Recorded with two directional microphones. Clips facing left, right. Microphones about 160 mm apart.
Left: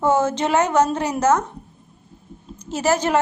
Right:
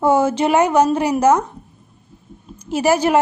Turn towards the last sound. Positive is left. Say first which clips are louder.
# right 4 dB
turn(degrees=-10)  # may be behind; listen again after turning